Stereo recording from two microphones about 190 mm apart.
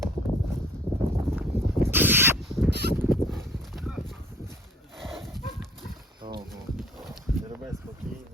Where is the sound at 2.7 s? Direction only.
60° right (ahead or behind).